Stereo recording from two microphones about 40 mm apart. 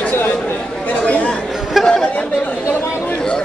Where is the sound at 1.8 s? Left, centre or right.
Centre.